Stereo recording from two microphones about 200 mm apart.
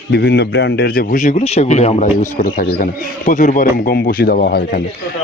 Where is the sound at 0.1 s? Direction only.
55° left (ahead or behind).